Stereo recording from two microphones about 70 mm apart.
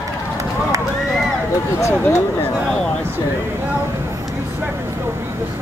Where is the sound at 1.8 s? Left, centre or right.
Left.